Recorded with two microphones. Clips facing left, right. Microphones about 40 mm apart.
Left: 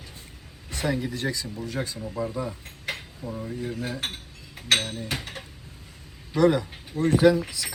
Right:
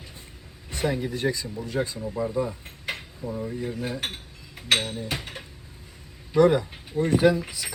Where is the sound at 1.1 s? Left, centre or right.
Right.